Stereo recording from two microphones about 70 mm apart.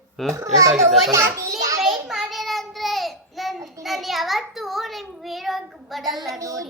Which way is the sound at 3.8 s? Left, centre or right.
Centre.